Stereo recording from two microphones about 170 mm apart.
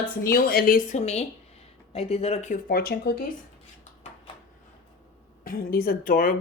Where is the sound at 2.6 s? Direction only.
60° left (ahead or behind).